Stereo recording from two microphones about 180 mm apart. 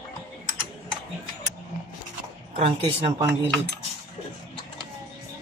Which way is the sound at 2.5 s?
35° right (ahead or behind).